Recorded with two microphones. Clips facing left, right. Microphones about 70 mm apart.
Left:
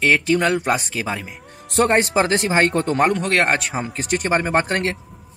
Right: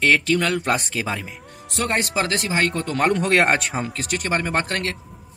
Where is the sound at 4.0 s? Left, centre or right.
Left.